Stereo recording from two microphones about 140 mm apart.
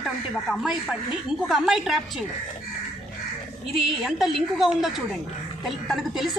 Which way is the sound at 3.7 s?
Centre (ahead or behind).